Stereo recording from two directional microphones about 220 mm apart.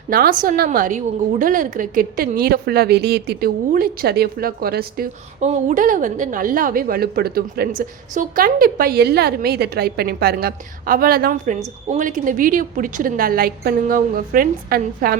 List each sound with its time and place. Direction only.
0.1 s a woman's voice: 40° right (ahead or behind)
5.5 s a woman's voice: 35° right (ahead or behind)